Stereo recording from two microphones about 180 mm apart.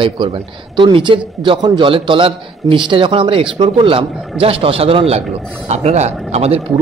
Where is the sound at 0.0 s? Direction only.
25° right (ahead or behind).